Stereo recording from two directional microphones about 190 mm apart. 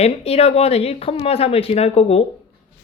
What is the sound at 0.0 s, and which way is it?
Speech, 35° left (ahead or behind).